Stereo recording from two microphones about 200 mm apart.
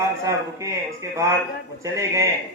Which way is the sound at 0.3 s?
15° right (ahead or behind).